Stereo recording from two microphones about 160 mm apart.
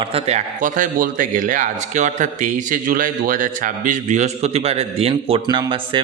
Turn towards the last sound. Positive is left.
turn(degrees=-30)  # may be behind; listen again after turning